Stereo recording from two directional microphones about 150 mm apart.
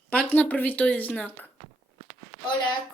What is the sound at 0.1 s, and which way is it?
Speech, 10° left (ahead or behind).